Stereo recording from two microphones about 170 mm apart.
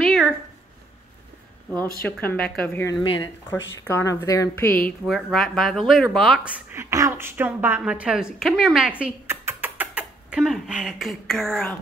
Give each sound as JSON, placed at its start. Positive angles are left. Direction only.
{"t": 0.0, "sound": "a sound", "side_deg": 0}
{"t": 2.0, "sound": "a woman's voice", "side_deg": 10}
{"t": 2.9, "sound": "a woman's voice", "side_deg": 25}
{"t": 4.8, "sound": "speech", "side_deg": 0}
{"t": 6.7, "sound": "a woman's voice", "side_deg": -15}
{"t": 9.0, "sound": "rodents", "side_deg": -15}